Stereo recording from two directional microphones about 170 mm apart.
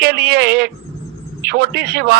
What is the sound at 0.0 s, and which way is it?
A man's voice, 70° right (ahead or behind).